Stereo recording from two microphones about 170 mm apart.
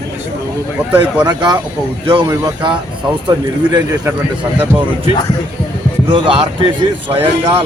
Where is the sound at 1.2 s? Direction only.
25° right (ahead or behind).